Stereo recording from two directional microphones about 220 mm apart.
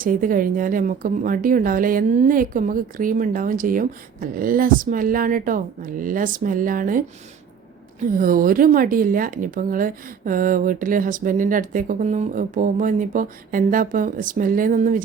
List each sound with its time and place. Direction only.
0.0 s speech: 40° right (ahead or behind)
8.2 s speech: 40° right (ahead or behind)